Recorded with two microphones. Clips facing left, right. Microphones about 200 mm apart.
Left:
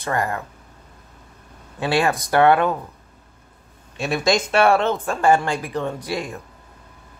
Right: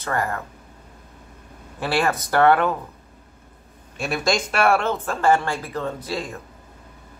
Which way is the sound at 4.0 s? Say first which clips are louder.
Left 3 dB; 20° left (ahead or behind).